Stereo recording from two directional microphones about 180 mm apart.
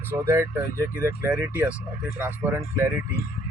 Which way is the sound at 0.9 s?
10° right (ahead or behind).